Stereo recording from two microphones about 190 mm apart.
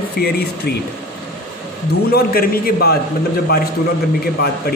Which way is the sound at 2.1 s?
50° left (ahead or behind).